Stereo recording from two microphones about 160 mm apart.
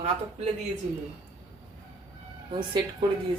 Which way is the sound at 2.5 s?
30° right (ahead or behind).